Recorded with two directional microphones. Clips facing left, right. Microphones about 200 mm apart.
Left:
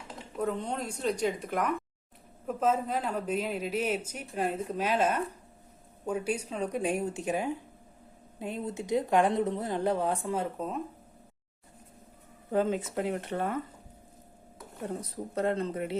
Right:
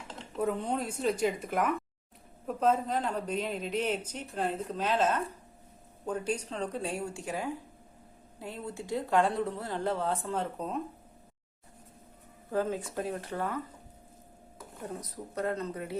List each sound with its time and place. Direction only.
0.3 s a woman's voice: 5° right (ahead or behind)
12.5 s speech: 20° left (ahead or behind)
14.8 s speech: 30° left (ahead or behind)